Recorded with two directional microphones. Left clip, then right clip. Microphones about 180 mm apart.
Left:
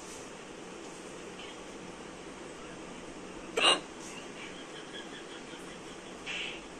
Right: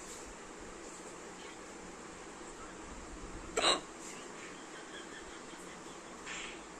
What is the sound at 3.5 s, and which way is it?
Hiccup, 15° right (ahead or behind).